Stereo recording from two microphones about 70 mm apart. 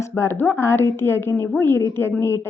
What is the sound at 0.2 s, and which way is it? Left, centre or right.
A woman's voice, left.